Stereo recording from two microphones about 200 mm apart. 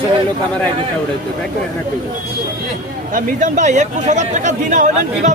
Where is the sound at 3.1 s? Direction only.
40° right (ahead or behind).